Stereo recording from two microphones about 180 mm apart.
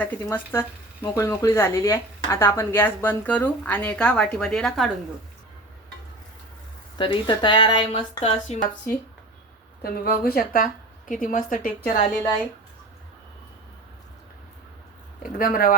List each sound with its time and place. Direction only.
0.0 s a woman's voice: 10° left (ahead or behind)
7.0 s speech: 25° left (ahead or behind)
9.8 s a woman's voice: 55° left (ahead or behind)
15.4 s a woman's voice: 55° left (ahead or behind)